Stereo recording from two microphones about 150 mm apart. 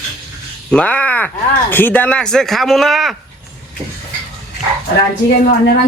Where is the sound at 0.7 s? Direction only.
10° left (ahead or behind).